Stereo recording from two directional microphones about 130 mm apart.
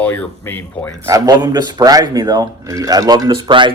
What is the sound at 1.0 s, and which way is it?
Speech, 30° right (ahead or behind).